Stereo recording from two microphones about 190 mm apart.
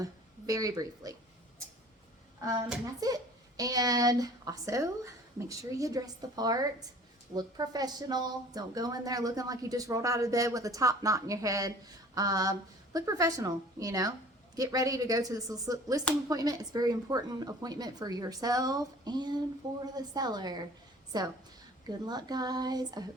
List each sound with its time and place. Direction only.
0.0 s a woman's voice: 15° right (ahead or behind)
3.0 s speech: 20° right (ahead or behind)